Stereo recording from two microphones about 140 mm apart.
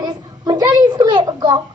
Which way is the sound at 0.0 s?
30° right (ahead or behind).